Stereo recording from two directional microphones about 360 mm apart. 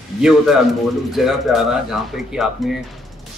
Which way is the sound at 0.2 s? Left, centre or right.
Centre.